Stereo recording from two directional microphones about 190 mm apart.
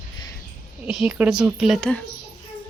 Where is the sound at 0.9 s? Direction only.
5° right (ahead or behind).